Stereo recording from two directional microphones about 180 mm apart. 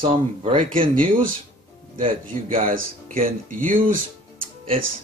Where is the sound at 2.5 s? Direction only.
50° right (ahead or behind).